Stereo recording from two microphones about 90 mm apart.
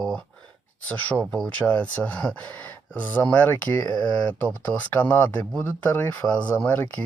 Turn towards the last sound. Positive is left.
turn(degrees=15)  # may be behind; listen again after turning